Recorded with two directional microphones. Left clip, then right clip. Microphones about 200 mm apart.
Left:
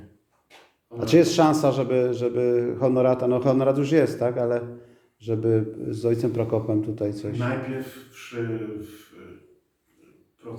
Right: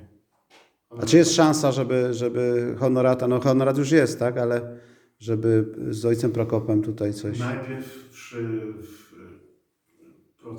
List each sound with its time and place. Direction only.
0.9 s a man's voice: 20° right (ahead or behind)